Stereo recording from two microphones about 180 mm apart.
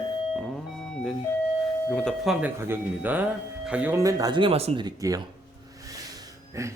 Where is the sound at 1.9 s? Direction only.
5° left (ahead or behind).